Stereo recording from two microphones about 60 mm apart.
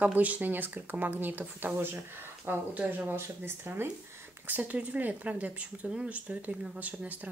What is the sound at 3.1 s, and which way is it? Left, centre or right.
Speech, right.